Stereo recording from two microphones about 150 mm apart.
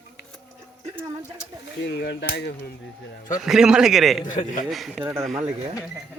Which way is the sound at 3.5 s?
5° right (ahead or behind).